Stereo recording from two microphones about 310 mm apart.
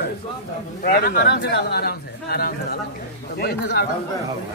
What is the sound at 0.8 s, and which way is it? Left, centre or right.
Speech, left.